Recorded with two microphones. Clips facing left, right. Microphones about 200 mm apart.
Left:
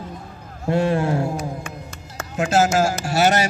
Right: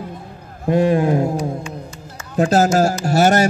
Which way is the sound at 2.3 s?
35° right (ahead or behind).